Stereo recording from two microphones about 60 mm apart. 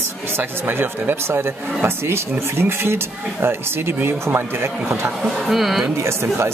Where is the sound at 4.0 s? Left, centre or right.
Right.